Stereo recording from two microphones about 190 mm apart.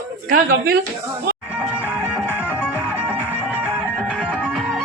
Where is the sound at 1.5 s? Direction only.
5° right (ahead or behind).